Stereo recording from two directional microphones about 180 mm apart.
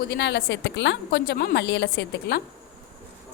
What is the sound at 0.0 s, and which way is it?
A woman's voice, 65° left (ahead or behind).